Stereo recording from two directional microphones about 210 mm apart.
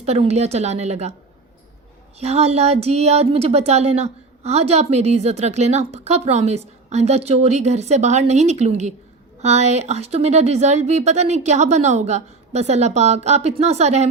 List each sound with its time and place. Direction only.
0.0 s speech: 30° right (ahead or behind)
2.1 s speech: 30° right (ahead or behind)